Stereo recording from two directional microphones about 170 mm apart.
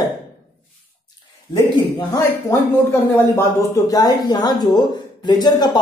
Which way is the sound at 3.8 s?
20° left (ahead or behind).